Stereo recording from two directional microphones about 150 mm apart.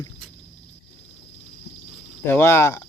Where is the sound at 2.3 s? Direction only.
15° left (ahead or behind).